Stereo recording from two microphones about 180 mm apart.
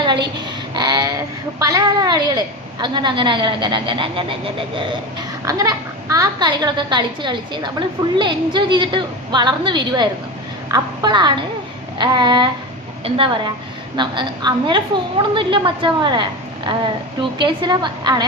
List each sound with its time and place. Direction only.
0.0 s a sound: 25° right (ahead or behind)
1.6 s a child's voice: 20° right (ahead or behind)
5.5 s a child's voice: 20° right (ahead or behind)